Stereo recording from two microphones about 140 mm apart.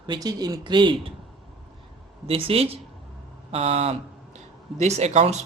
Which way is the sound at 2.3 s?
40° right (ahead or behind).